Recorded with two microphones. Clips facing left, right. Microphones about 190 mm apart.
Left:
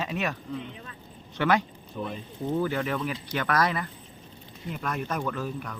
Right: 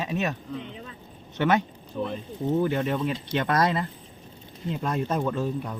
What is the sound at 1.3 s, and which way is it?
Speech, 20° right (ahead or behind).